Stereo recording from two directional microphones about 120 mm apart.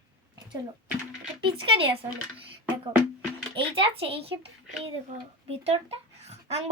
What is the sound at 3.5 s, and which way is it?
Speech, 50° right (ahead or behind).